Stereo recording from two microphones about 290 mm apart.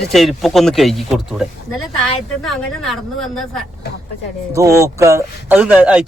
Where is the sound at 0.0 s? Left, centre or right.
Centre.